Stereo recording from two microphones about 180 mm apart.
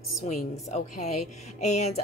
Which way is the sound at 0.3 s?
40° left (ahead or behind).